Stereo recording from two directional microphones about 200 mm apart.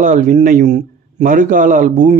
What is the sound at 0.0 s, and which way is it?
A man's voice, 40° right (ahead or behind).